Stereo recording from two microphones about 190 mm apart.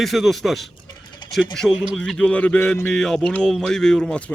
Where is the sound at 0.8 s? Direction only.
25° left (ahead or behind).